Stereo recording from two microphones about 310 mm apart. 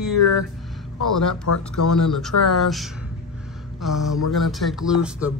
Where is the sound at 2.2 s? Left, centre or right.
Centre.